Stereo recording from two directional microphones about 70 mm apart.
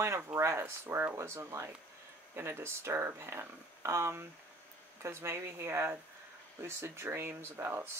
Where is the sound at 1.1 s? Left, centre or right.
Right.